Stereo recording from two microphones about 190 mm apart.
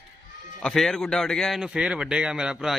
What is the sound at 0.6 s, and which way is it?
A man's voice, 5° left (ahead or behind).